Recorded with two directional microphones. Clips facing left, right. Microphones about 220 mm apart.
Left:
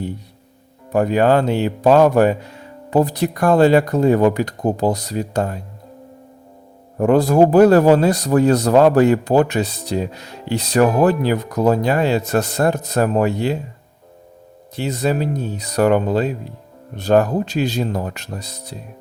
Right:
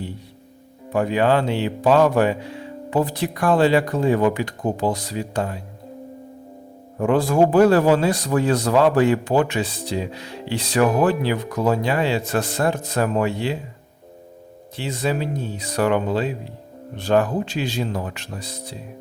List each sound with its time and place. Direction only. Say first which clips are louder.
0.9 s speech: left 4 dB; 45° left (ahead or behind)
7.0 s a man's voice: left 4 dB; 40° left (ahead or behind)
14.8 s a man's voice: left 4 dB; 40° left (ahead or behind)